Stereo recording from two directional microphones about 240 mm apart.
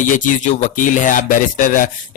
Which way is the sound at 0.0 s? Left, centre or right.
Left.